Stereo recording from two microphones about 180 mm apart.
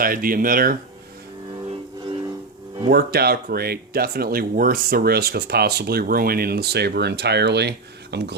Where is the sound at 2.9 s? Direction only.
60° right (ahead or behind).